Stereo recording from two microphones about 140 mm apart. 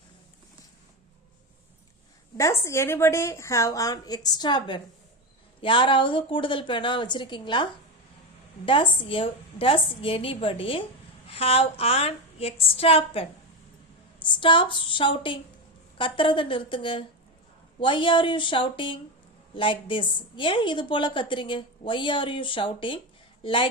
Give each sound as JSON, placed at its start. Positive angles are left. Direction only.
{"t": 2.4, "sound": "a woman's voice", "side_deg": 20}